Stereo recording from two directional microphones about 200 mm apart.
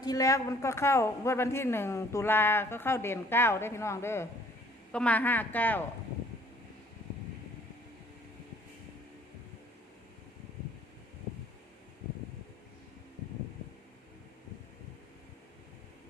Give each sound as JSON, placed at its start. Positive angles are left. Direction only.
{"t": 0.0, "sound": "a man's voice", "side_deg": 20}